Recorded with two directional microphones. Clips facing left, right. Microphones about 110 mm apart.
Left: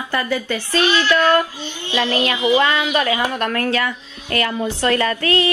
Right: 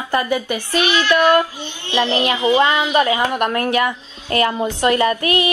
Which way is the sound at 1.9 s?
20° right (ahead or behind).